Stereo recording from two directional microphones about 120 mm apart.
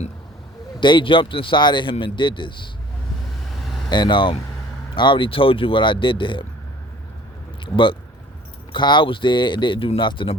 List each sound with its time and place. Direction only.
0.8 s speech: 40° left (ahead or behind)
3.8 s speech: 40° left (ahead or behind)
7.6 s speech: 45° left (ahead or behind)